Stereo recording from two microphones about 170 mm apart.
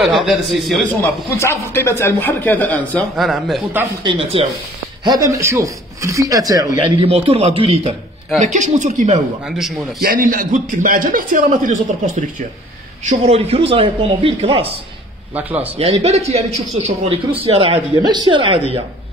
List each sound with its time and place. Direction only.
0.0 s a man's voice: centre (ahead or behind)
1.0 s speech: 15° left (ahead or behind); by 3.6 s centre (ahead or behind)
4.0 s a man's voice: 30° right (ahead or behind)
5.0 s a man's voice: 20° right (ahead or behind)
6.8 s a man's voice: 35° right (ahead or behind)
9.6 s a man's voice: centre (ahead or behind)
10.0 s a man's voice: 55° right (ahead or behind)
13.0 s a man's voice: 40° right (ahead or behind)
15.3 s speech: 10° right (ahead or behind)
15.8 s a man's voice: 40° right (ahead or behind)